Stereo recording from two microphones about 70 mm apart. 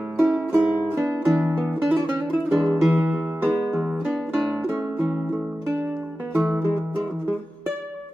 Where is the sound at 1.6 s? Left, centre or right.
Right.